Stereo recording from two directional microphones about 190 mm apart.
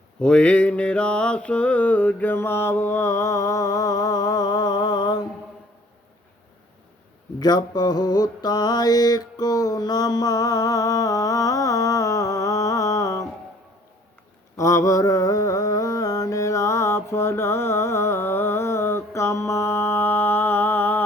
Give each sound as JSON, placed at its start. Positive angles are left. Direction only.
{"t": 0.2, "sound": "mantra", "side_deg": 5}
{"t": 7.3, "sound": "mantra", "side_deg": 20}
{"t": 14.5, "sound": "mantra", "side_deg": 15}